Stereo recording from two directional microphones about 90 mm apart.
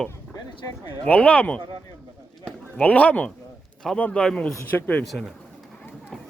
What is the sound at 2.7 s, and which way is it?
Speech, 15° left (ahead or behind).